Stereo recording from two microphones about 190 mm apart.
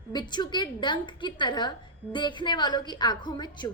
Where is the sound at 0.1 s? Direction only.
25° left (ahead or behind).